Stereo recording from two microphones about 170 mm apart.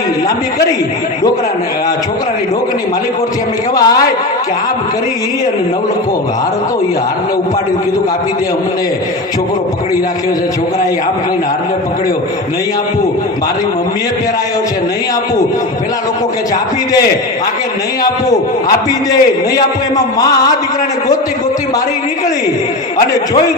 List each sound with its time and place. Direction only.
3.8 s a man's voice: 20° left (ahead or behind)
19.1 s a man's voice: 65° left (ahead or behind)
20.1 s a man's voice: 20° left (ahead or behind)